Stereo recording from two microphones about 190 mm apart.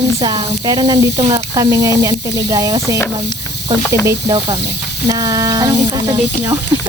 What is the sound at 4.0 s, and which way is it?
Speech, 15° right (ahead or behind).